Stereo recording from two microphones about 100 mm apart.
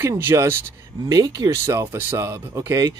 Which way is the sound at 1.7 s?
25° right (ahead or behind).